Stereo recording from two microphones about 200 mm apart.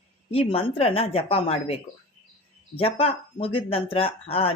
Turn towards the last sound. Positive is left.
turn(degrees=30)  # may be behind; listen again after turning